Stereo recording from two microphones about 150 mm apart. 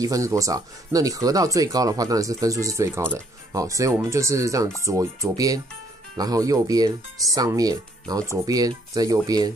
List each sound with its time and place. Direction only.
0.0 s speech: 20° right (ahead or behind)